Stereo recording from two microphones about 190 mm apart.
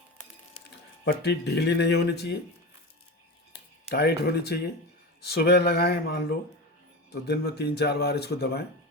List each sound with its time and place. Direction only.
1.0 s speech: 60° left (ahead or behind)
3.8 s speech: 60° left (ahead or behind)